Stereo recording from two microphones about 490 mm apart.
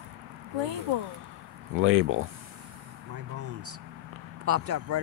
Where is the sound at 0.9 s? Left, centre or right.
Right.